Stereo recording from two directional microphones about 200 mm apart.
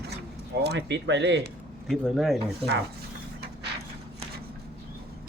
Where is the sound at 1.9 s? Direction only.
Centre (ahead or behind).